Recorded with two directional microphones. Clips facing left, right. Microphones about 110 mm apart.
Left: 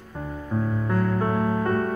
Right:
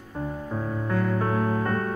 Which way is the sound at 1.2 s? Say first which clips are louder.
Left 2 dB; 15° left (ahead or behind).